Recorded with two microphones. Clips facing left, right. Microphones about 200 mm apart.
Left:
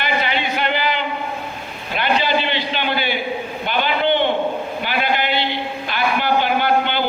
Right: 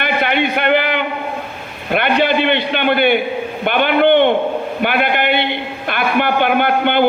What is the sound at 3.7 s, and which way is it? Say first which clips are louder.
A man's voice: right 7 dB; 60° right (ahead or behind).